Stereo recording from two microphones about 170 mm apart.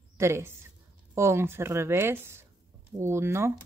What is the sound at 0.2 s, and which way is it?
Speech, 15° right (ahead or behind).